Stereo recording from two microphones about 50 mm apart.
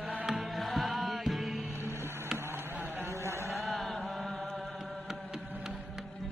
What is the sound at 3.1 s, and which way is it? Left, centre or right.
Chant, right.